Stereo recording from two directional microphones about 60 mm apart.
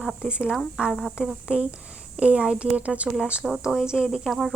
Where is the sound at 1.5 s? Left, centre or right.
Centre.